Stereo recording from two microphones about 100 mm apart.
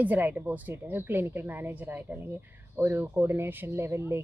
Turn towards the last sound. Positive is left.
turn(degrees=-25)  # may be behind; listen again after turning